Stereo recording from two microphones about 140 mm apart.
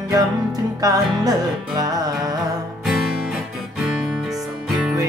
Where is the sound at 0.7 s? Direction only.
25° right (ahead or behind).